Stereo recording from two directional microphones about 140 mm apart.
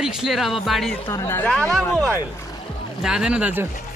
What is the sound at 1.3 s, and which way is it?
Speech, 10° left (ahead or behind).